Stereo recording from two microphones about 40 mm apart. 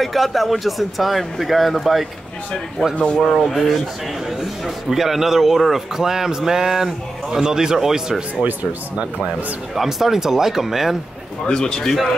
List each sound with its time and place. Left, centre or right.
0.0 s speech: centre
4.6 s a man's voice: centre
9.8 s a man's voice: centre
11.4 s a man's voice: centre
11.8 s speech: centre